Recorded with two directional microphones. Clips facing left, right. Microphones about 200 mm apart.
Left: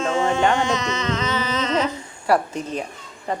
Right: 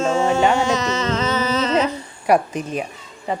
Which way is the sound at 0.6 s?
40° right (ahead or behind).